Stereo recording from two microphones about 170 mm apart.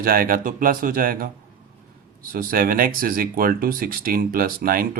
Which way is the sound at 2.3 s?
55° right (ahead or behind).